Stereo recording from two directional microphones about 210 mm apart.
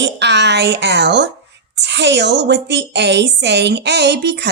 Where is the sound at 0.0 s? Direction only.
55° right (ahead or behind).